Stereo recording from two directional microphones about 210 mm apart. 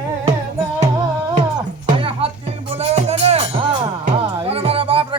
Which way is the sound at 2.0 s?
30° right (ahead or behind).